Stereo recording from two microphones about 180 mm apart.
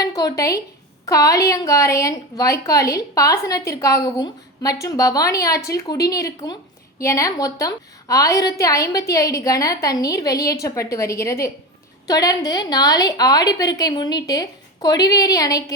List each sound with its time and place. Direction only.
0.0 s a woman's voice: 20° left (ahead or behind)